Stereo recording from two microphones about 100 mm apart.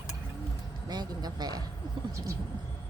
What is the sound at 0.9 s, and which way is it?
Speech, 45° right (ahead or behind).